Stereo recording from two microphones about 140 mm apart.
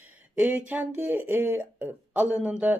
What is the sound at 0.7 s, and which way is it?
Speech, 10° right (ahead or behind).